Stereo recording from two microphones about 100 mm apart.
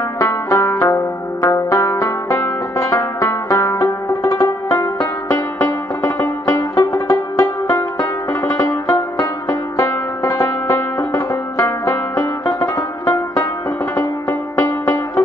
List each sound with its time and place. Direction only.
0.2 s music: 30° left (ahead or behind)
13.0 s music: 25° left (ahead or behind)